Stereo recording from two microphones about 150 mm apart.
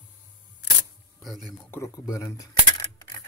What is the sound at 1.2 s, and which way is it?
Speech, centre (ahead or behind).